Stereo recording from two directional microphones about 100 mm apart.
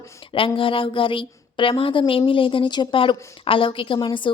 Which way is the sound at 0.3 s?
60° left (ahead or behind).